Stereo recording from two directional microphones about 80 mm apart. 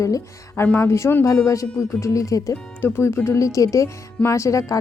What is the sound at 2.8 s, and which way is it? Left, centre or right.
A woman's voice, left.